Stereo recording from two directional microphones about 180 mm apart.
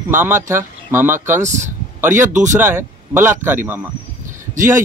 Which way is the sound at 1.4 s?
40° right (ahead or behind).